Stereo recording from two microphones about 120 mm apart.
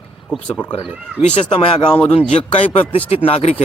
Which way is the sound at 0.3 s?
10° left (ahead or behind).